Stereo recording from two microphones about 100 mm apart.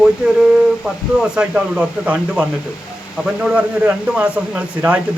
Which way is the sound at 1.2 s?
5° right (ahead or behind).